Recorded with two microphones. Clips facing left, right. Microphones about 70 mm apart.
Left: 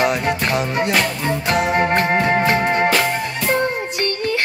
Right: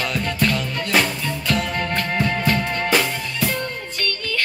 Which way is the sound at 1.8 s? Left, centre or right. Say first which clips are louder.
Left 6 dB; left.